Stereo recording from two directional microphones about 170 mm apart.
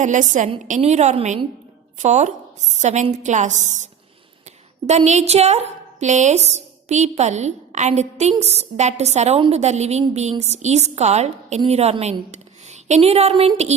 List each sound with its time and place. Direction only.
0.0 s a woman's voice: 45° right (ahead or behind)
4.9 s a woman's voice: 40° right (ahead or behind)